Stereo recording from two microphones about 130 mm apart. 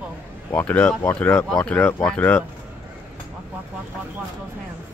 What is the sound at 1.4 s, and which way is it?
Speech, 5° left (ahead or behind).